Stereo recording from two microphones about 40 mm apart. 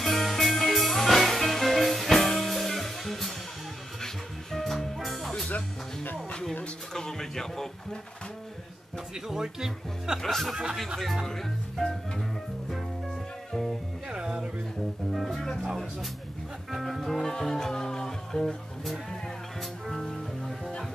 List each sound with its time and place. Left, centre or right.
0.0 s music: centre
6.9 s a sound: centre
9.1 s speech: centre
10.2 s speech: centre
10.5 s speech: centre
11.2 s speech: centre
13.5 s music: centre
14.0 s music: centre
15.1 s speech: centre
16.7 s music: centre
19.6 s music: centre